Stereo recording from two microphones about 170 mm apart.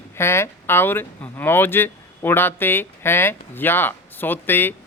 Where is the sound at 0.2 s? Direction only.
15° left (ahead or behind).